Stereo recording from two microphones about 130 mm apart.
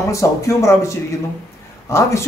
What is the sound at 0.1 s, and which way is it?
Speech, 25° left (ahead or behind).